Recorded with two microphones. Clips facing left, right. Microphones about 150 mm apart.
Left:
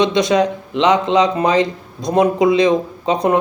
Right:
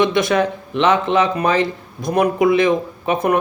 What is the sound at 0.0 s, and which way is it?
Speech, 20° left (ahead or behind).